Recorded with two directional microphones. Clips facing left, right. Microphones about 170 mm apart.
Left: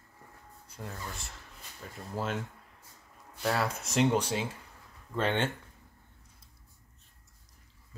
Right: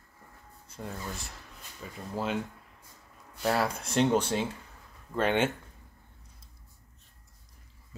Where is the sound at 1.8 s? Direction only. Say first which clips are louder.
Right 3 dB; 5° right (ahead or behind).